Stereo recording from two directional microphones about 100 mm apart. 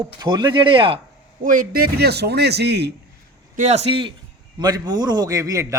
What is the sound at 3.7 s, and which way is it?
Speech, 75° right (ahead or behind).